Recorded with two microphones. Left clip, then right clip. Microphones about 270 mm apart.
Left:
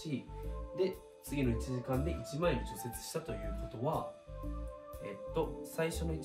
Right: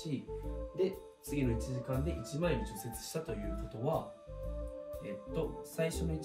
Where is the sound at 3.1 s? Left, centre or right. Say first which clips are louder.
Right 1 dB; centre.